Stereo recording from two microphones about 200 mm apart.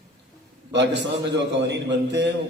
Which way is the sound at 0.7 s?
60° right (ahead or behind).